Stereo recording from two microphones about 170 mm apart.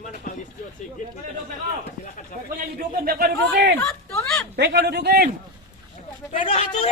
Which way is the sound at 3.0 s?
60° right (ahead or behind).